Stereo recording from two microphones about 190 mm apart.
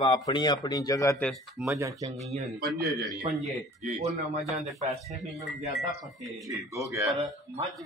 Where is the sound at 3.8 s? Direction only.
35° right (ahead or behind).